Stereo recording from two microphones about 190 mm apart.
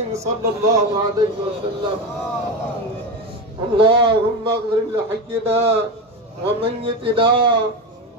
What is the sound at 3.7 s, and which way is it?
Speech, 25° right (ahead or behind).